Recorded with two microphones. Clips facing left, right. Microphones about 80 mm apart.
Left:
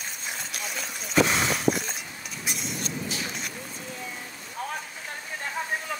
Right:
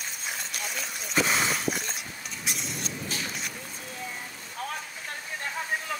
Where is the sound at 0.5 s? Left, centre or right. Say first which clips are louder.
Left 1 dB; centre.